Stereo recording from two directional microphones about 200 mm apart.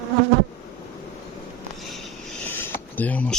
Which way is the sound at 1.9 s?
Centre (ahead or behind).